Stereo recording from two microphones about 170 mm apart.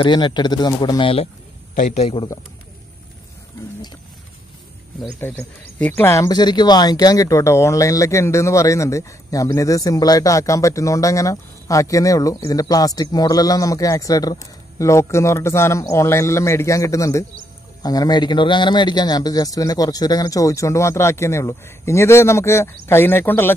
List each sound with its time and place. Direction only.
0.0 s a man's voice: 25° left (ahead or behind)
5.2 s speech: 15° left (ahead or behind)